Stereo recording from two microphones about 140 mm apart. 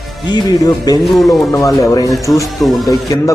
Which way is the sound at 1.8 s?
25° left (ahead or behind).